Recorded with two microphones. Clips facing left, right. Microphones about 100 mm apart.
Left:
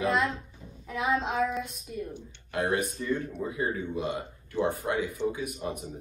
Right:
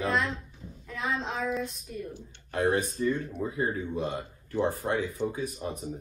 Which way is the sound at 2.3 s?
35° right (ahead or behind).